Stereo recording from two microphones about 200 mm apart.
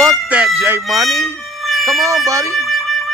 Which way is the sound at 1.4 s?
Centre (ahead or behind).